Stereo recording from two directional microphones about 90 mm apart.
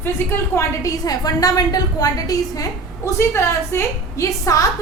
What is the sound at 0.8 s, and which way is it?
A woman's voice, 45° left (ahead or behind).